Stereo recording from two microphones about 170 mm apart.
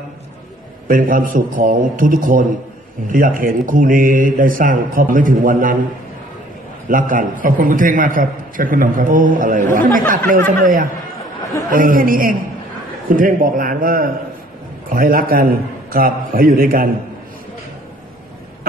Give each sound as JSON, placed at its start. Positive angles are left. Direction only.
{"t": 0.8, "sound": "a man's voice", "side_deg": -55}
{"t": 6.9, "sound": "a man's voice", "side_deg": -55}